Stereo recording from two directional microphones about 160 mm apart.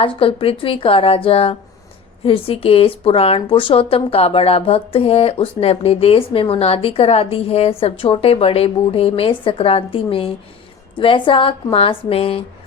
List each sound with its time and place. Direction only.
0.0 s speech: 35° left (ahead or behind)